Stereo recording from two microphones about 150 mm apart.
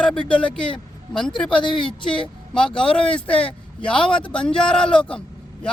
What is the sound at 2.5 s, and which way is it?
Speech, 5° left (ahead or behind).